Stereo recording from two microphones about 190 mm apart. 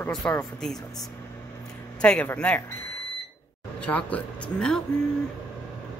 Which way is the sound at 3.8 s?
5° left (ahead or behind).